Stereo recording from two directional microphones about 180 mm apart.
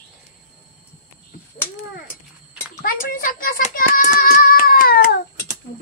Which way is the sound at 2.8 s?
50° left (ahead or behind).